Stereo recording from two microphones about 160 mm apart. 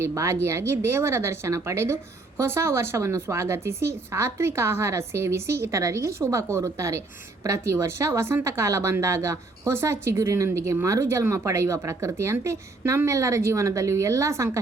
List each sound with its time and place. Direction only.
0.0 s a woman's voice: 20° right (ahead or behind)